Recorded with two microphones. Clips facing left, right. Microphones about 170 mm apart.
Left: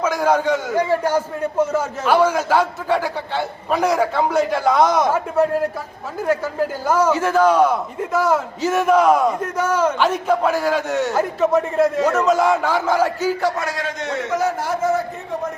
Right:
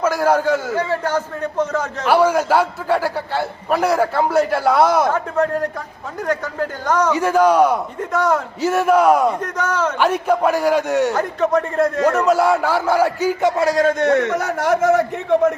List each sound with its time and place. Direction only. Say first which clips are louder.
0.0 s a man's voice: right 1 dB; 5° right (ahead or behind)
0.7 s a man's voice: left 2 dB; 10° left (ahead or behind)
2.0 s a man's voice: right 2 dB; 10° right (ahead or behind)
5.0 s a man's voice: left 1 dB; 10° left (ahead or behind)
7.2 s a man's voice: right 4 dB; 10° right (ahead or behind)
8.1 s a man's voice: even; centre (ahead or behind)
8.6 s a man's voice: right 1 dB; 10° right (ahead or behind)
9.4 s a man's voice: left 2 dB; 10° left (ahead or behind)
10.0 s a man's voice: right 1 dB; 10° right (ahead or behind)
11.1 s a man's voice: even; 5° left (ahead or behind)
12.2 s a man's voice: right 1 dB; 10° right (ahead or behind)
13.6 s a man's voice: right 9 dB; 40° right (ahead or behind)
14.0 s a man's voice: right 4 dB; 65° right (ahead or behind); by 15.5 s 80° right